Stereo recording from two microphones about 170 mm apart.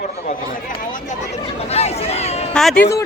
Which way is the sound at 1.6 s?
40° left (ahead or behind).